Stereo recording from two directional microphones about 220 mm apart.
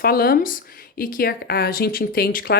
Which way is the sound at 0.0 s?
40° left (ahead or behind).